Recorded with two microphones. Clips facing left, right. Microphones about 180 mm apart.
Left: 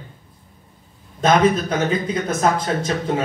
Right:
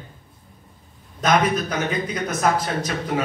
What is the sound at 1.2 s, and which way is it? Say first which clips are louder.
A man's voice: left 4 dB; 30° left (ahead or behind).